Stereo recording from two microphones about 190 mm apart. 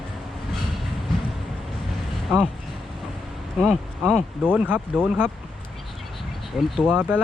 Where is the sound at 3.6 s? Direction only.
Centre (ahead or behind).